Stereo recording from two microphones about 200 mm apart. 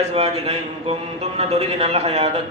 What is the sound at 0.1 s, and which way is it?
Speech, 30° right (ahead or behind).